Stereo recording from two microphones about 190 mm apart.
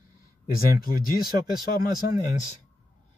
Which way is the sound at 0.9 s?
20° right (ahead or behind).